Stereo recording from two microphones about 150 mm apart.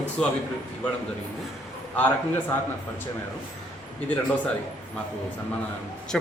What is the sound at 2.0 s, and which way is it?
Speech, 10° left (ahead or behind).